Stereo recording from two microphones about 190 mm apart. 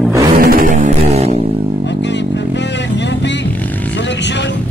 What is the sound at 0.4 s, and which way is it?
Music, 50° right (ahead or behind).